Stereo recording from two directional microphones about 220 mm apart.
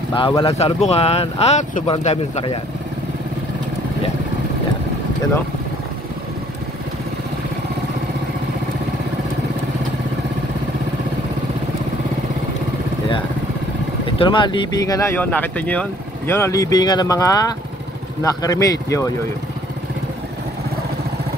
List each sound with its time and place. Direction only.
0.1 s speech: 20° left (ahead or behind)
14.1 s speech: 20° left (ahead or behind)